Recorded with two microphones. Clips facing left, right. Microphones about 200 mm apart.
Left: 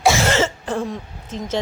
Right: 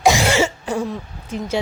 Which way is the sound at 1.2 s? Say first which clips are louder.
Right 2 dB; 10° right (ahead or behind).